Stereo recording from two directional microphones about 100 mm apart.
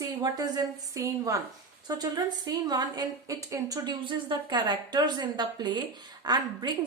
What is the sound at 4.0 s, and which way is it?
A woman's voice, 50° right (ahead or behind).